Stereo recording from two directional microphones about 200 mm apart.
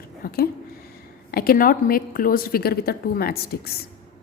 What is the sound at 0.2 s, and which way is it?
A woman's voice, 45° left (ahead or behind).